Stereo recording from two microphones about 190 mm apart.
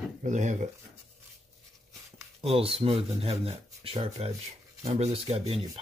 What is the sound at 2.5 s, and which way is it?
Speech, 30° right (ahead or behind).